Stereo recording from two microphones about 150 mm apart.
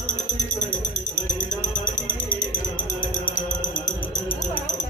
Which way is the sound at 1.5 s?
60° left (ahead or behind).